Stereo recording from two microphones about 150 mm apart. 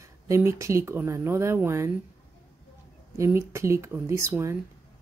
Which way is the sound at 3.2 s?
15° right (ahead or behind).